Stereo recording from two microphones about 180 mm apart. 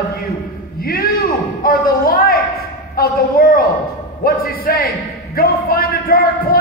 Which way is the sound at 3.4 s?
60° left (ahead or behind).